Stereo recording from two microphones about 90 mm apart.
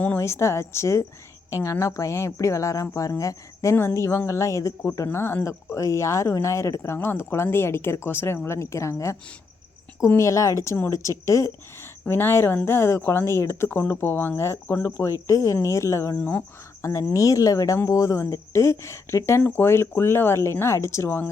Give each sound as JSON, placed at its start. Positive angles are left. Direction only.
{"t": 0.2, "sound": "speech", "side_deg": 30}
{"t": 10.2, "sound": "speech", "side_deg": 35}